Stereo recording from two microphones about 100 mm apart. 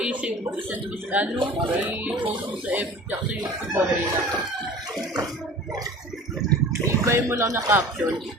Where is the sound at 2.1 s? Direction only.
55° right (ahead or behind).